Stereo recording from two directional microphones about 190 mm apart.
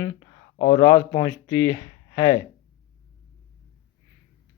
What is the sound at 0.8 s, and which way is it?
Speech, 20° left (ahead or behind).